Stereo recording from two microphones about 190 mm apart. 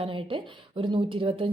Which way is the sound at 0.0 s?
30° right (ahead or behind).